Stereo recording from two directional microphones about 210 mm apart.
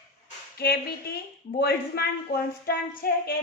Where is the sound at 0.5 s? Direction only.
50° left (ahead or behind).